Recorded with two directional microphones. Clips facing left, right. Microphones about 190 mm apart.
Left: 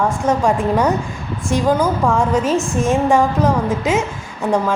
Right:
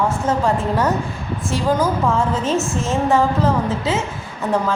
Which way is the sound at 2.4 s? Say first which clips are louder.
Left 3 dB; 10° left (ahead or behind).